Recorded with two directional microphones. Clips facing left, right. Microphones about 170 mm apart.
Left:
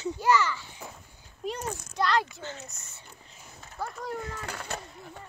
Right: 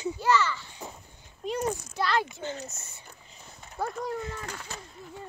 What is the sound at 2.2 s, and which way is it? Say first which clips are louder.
Speech: right 4 dB; 20° right (ahead or behind).